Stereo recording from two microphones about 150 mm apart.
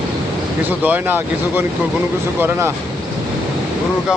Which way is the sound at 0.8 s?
10° right (ahead or behind).